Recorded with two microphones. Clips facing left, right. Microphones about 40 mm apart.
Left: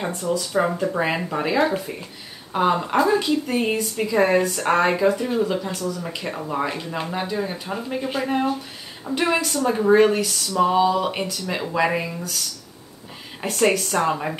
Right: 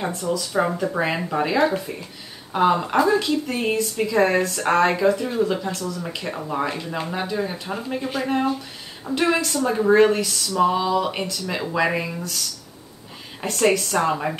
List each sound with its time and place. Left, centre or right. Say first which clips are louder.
0.1 s speech: left 1 dB; centre
0.5 s a woman's voice: even; centre